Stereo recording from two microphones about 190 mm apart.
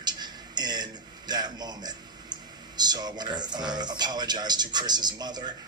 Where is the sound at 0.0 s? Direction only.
20° right (ahead or behind).